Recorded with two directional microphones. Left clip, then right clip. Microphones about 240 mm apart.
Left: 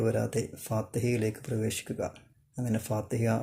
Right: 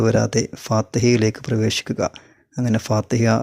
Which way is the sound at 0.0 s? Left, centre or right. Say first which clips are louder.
Right 11 dB; right.